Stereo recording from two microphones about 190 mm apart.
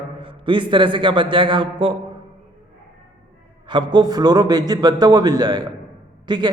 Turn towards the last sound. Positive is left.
turn(degrees=-25)  # may be behind; listen again after turning